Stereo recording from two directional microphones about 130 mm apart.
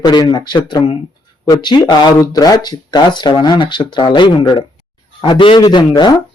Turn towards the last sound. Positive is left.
turn(degrees=35)  # may be behind; listen again after turning